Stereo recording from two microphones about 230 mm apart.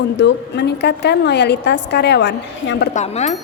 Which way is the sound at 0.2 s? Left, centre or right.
Left.